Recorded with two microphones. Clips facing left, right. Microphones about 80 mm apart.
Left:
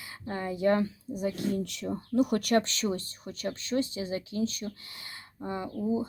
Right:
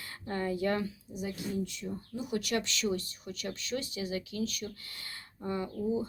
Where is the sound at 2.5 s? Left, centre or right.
Left.